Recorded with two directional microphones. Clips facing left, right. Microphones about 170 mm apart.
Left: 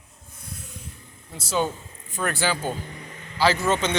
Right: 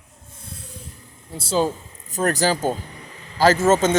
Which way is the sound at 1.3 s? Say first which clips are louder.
Right 4 dB; 30° right (ahead or behind).